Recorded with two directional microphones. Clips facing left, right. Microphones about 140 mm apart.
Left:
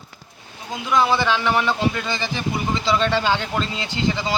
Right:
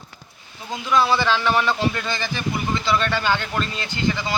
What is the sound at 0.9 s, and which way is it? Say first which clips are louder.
Speech: even; 15° left (ahead or behind).